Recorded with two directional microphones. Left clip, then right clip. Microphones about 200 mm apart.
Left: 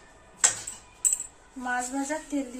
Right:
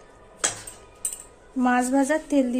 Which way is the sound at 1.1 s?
45° right (ahead or behind).